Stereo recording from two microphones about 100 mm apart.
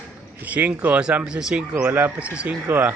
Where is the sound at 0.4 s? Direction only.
15° right (ahead or behind).